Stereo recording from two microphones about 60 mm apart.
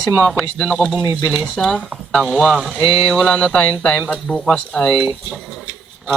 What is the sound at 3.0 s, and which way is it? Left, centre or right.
Speech, centre.